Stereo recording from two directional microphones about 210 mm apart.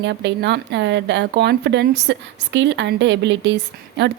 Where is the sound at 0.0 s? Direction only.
55° right (ahead or behind).